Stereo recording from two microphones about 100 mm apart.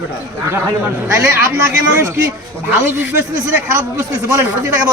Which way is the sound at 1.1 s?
30° right (ahead or behind).